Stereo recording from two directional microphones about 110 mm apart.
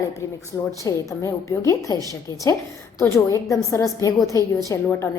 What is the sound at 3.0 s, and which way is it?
A woman's voice, 25° left (ahead or behind).